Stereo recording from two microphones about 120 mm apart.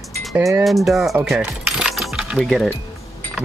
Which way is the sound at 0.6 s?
Centre (ahead or behind).